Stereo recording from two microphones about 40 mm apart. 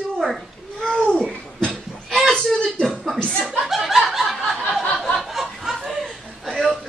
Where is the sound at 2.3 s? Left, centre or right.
Centre.